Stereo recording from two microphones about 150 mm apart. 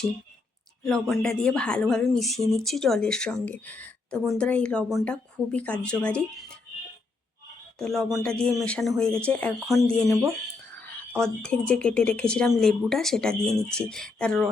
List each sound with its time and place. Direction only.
0.9 s speech: centre (ahead or behind)
7.8 s speech: centre (ahead or behind)